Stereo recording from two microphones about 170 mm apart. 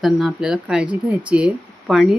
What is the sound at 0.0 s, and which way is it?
Speech, centre (ahead or behind).